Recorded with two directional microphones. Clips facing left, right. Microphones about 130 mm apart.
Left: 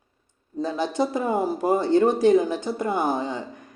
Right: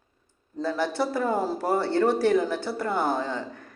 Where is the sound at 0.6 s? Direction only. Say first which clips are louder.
Left 2 dB; 20° left (ahead or behind).